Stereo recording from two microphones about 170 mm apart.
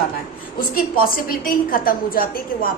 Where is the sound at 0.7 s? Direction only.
60° left (ahead or behind).